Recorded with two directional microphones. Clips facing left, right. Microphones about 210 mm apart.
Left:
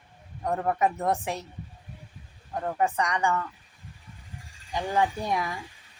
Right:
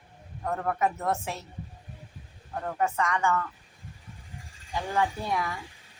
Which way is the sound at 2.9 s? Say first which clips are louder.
Even; 15° left (ahead or behind).